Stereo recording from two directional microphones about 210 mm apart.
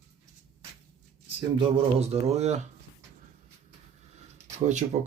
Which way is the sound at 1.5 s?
30° right (ahead or behind).